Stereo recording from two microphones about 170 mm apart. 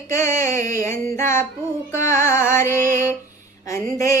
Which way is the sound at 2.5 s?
50° right (ahead or behind).